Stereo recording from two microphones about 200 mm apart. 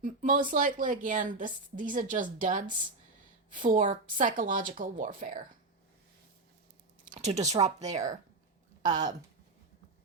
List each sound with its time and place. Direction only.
0.0 s a woman's voice: 40° right (ahead or behind)
7.1 s a woman's voice: 35° right (ahead or behind)